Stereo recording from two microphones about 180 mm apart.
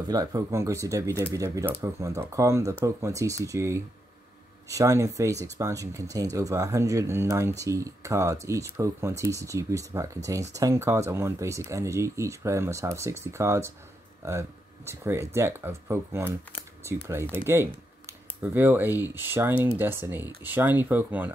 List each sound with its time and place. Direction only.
0.1 s speech: 20° right (ahead or behind)
14.9 s speech: 15° right (ahead or behind)